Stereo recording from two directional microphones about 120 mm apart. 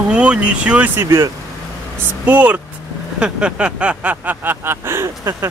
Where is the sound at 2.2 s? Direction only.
10° right (ahead or behind).